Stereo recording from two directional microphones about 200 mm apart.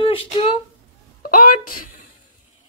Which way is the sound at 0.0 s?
25° left (ahead or behind).